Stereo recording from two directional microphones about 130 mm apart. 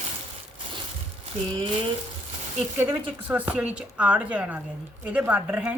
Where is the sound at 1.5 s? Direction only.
40° right (ahead or behind).